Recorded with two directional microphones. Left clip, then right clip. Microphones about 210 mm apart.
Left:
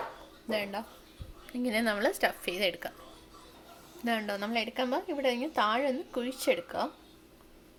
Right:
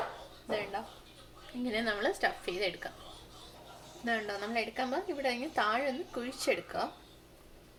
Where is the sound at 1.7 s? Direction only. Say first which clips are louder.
Left 3 dB; 45° left (ahead or behind).